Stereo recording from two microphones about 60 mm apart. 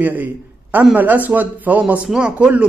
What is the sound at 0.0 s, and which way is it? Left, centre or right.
A man's voice, right.